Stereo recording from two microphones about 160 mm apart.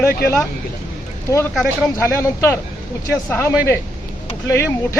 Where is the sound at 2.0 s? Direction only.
15° left (ahead or behind).